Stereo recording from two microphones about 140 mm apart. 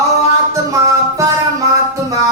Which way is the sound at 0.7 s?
20° right (ahead or behind).